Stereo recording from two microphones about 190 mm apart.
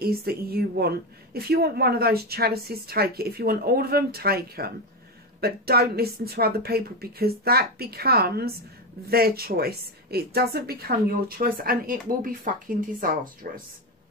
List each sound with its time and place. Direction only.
0.0 s a woman's voice: 55° right (ahead or behind)